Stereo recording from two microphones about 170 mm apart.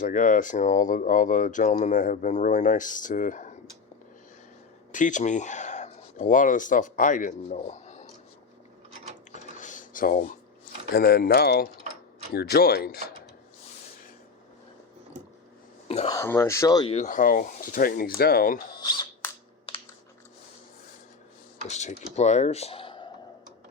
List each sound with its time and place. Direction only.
0.0 s speech: 50° left (ahead or behind)
4.9 s speech: 50° left (ahead or behind)
9.3 s a sound: 50° left (ahead or behind)
10.9 s speech: 70° left (ahead or behind)
16.0 s speech: 15° left (ahead or behind)
16.9 s speech: 45° left (ahead or behind)
18.8 s speech: 25° left (ahead or behind)
21.7 s speech: 40° left (ahead or behind)